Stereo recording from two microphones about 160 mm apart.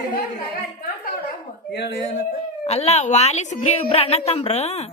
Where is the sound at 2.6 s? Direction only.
45° left (ahead or behind).